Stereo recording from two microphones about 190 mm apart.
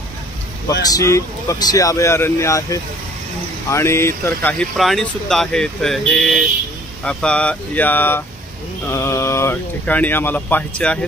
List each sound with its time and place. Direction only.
0.8 s speech: 15° left (ahead or behind)